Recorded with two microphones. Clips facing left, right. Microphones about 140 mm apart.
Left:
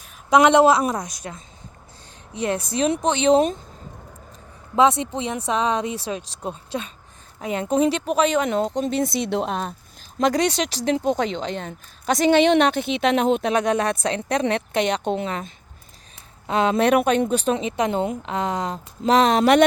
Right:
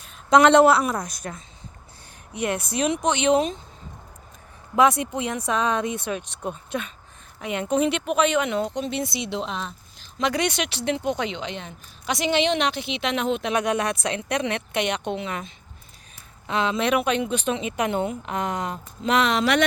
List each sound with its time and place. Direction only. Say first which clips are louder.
0.3 s a woman's voice: even; 10° left (ahead or behind)
2.3 s speech: left 2 dB; 30° left (ahead or behind)
4.8 s speech: left 1 dB; 25° left (ahead or behind)
16.5 s speech: left 5 dB; 40° left (ahead or behind)